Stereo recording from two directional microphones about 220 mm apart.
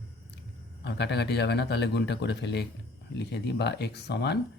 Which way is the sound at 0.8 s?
50° left (ahead or behind).